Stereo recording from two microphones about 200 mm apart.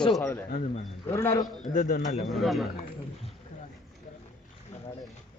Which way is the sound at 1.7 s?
40° left (ahead or behind).